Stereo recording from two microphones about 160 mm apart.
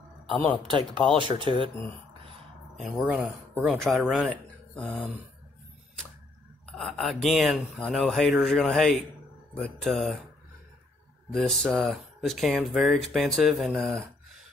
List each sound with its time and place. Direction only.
0.7 s speech: 30° right (ahead or behind)
2.8 s speech: 5° right (ahead or behind)
6.8 s speech: centre (ahead or behind)
11.3 s speech: centre (ahead or behind)